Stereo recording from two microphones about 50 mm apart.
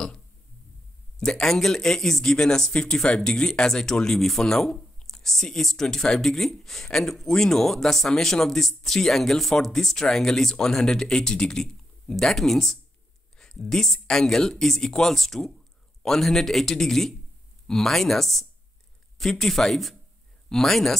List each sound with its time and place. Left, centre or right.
1.2 s speech: centre